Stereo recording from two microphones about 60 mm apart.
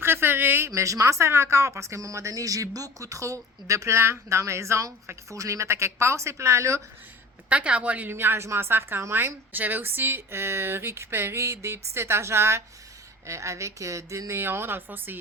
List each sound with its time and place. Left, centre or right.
0.0 s a sound: right
0.7 s a woman's voice: right
7.5 s a woman's voice: right
8.1 s a woman's voice: right
14.3 s speech: right